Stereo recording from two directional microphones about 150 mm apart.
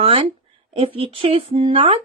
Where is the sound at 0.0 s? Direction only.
40° right (ahead or behind).